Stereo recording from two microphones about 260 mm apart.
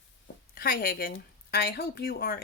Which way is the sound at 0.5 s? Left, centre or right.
Left.